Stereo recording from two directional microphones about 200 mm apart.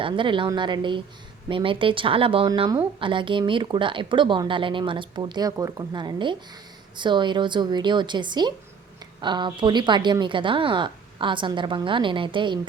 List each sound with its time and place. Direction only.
0.0 s speech: 25° right (ahead or behind)